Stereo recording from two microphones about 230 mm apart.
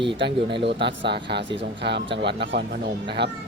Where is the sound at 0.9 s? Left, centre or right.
Right.